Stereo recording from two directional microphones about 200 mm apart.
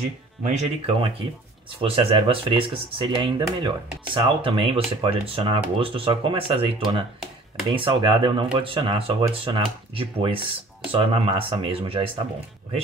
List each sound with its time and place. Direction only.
0.4 s speech: 35° right (ahead or behind)